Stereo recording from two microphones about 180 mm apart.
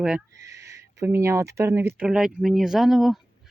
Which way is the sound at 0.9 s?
15° right (ahead or behind).